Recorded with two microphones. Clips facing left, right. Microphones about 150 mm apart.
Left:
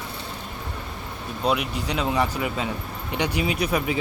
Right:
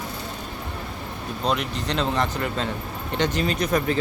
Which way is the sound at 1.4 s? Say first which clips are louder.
Left 1 dB; 10° left (ahead or behind).